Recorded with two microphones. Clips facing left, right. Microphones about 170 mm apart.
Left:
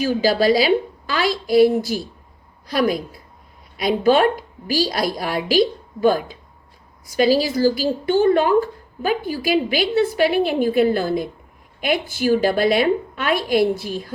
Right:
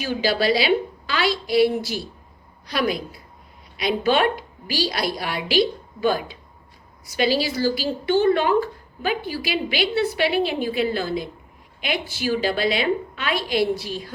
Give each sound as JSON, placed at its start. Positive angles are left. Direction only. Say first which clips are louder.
{"t": 0.0, "sound": "a woman's voice", "louder": "left 5 dB", "side_deg": 40}